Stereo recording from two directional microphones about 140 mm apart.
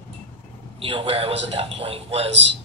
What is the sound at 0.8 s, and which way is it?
A man's voice, 40° right (ahead or behind).